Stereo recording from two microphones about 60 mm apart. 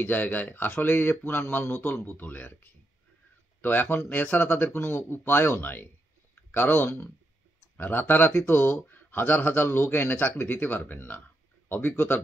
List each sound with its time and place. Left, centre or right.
0.0 s speech: left
2.0 s speech: left
3.6 s speech: left
8.3 s speech: left
8.8 s speech: left